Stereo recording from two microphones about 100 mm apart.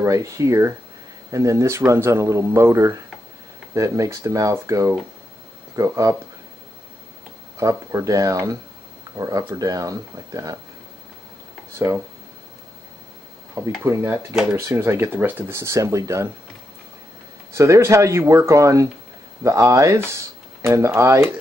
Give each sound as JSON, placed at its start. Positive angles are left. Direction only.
{"t": 0.0, "sound": "speech", "side_deg": -30}
{"t": 7.5, "sound": "speech", "side_deg": -30}
{"t": 13.6, "sound": "speech", "side_deg": -30}
{"t": 17.6, "sound": "speech", "side_deg": -30}